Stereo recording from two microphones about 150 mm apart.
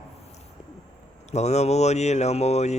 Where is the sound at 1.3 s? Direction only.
50° left (ahead or behind).